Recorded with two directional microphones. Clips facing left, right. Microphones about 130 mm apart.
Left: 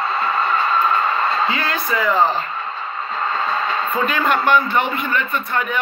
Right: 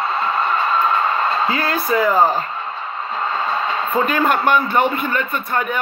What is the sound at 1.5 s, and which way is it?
Speech, 40° right (ahead or behind).